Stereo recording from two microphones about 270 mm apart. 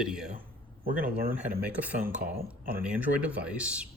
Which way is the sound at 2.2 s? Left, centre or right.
Right.